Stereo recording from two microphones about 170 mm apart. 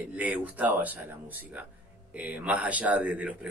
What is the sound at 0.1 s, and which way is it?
A man's voice, 10° right (ahead or behind).